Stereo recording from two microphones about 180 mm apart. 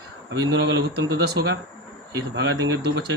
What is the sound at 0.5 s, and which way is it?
Speech, 70° right (ahead or behind).